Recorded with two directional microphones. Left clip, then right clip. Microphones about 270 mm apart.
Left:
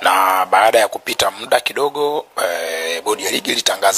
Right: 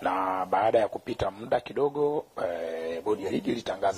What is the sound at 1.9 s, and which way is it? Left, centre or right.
Speech, left.